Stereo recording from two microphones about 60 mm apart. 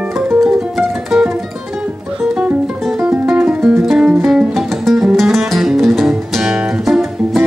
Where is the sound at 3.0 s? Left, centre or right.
Right.